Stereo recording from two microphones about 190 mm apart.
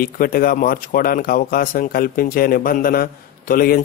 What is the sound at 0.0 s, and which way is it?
Speech, 50° left (ahead or behind).